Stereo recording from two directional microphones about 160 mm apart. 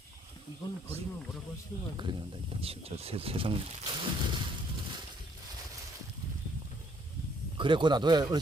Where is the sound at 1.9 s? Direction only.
30° right (ahead or behind).